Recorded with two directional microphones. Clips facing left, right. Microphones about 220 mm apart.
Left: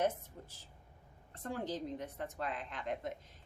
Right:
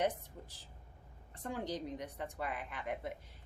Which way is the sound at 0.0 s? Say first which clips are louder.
Left 1 dB; 15° right (ahead or behind).